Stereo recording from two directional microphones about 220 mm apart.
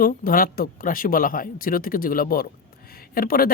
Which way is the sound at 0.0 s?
40° left (ahead or behind).